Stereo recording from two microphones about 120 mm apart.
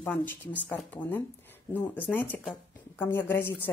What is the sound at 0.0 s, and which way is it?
A woman's voice, 15° left (ahead or behind).